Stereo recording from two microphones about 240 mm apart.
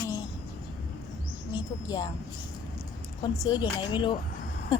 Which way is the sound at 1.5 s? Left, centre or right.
Centre.